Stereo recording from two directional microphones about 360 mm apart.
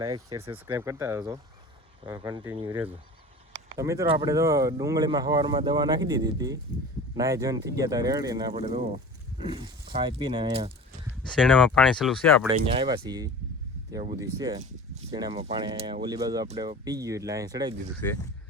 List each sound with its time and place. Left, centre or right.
0.0 s speech: centre
11.3 s speech: centre
12.5 s speech: centre